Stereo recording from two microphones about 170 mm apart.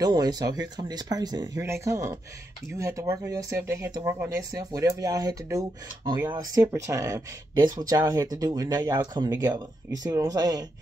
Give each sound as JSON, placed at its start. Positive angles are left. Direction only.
{"t": 0.0, "sound": "speech", "side_deg": -25}